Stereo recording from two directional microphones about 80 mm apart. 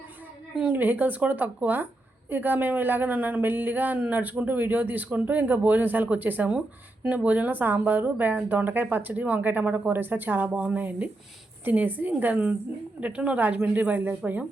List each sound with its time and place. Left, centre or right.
0.5 s a woman's voice: centre